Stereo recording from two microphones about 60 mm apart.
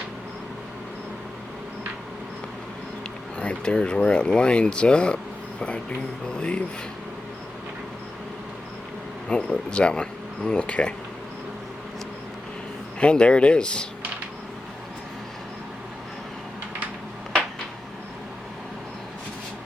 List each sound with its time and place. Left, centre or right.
3.3 s speech: centre
9.3 s speech: centre
13.0 s speech: centre